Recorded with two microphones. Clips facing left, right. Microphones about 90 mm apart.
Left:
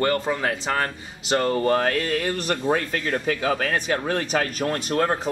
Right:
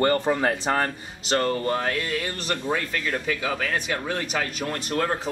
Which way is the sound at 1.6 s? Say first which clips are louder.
Left 4 dB; 45° left (ahead or behind).